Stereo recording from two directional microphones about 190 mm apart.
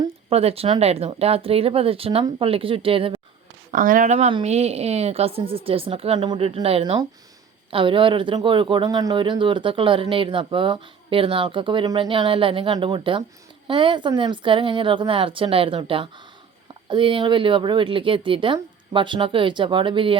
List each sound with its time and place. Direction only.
0.3 s speech: 30° right (ahead or behind)
3.7 s speech: 45° right (ahead or behind); by 20.1 s 25° right (ahead or behind)